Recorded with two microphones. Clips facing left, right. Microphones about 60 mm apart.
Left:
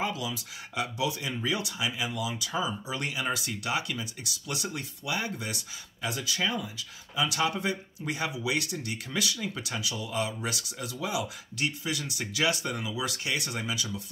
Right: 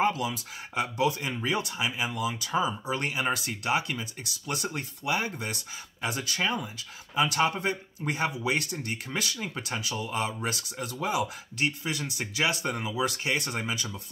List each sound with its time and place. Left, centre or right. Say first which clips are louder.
0.0 s speech: right 5 dB; right
6.0 s speech: right 1 dB; right